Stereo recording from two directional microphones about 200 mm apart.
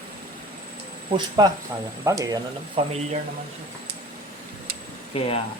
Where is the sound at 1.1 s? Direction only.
20° right (ahead or behind).